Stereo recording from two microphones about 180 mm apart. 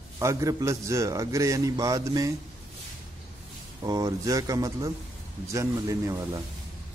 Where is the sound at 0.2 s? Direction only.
15° right (ahead or behind).